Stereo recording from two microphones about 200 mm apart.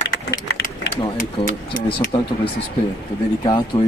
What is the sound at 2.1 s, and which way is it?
Speech, 25° left (ahead or behind).